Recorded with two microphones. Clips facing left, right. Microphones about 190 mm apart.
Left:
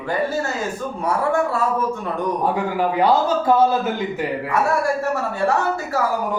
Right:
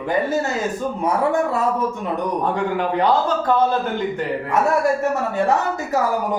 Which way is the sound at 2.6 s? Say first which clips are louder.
Left 1 dB; 5° left (ahead or behind).